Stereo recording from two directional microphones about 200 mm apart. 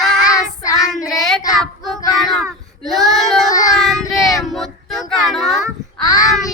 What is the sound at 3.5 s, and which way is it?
Child singing, 15° left (ahead or behind).